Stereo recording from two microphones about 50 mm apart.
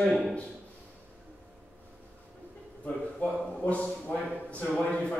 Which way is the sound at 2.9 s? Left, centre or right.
Left.